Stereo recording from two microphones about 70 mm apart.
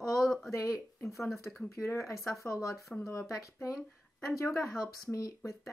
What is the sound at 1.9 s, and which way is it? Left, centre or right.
A woman's voice, left.